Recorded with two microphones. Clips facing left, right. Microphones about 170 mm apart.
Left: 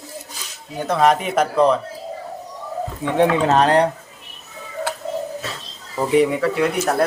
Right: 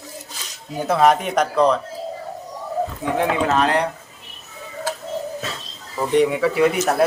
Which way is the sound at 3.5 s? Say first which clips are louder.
Left 3 dB; 35° left (ahead or behind).